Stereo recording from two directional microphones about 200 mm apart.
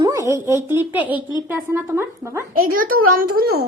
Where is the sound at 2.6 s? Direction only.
45° right (ahead or behind).